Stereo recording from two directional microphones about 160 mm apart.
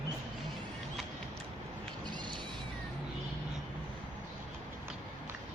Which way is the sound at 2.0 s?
30° right (ahead or behind).